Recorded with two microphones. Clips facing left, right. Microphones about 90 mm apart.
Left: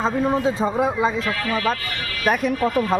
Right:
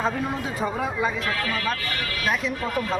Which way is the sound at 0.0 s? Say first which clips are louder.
Left 6 dB; 25° left (ahead or behind).